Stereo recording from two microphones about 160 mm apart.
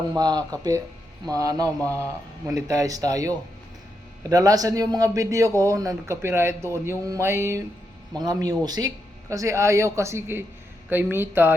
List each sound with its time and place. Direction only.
0.1 s a man's voice: 25° right (ahead or behind)
1.8 s speech: 10° left (ahead or behind)
2.5 s a man's voice: 20° right (ahead or behind)